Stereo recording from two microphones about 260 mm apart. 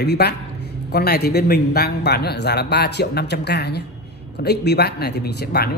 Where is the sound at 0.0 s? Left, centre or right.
Left.